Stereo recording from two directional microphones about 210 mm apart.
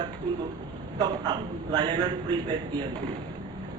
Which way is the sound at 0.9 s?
20° right (ahead or behind).